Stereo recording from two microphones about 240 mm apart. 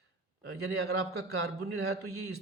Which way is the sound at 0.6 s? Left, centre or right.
Right.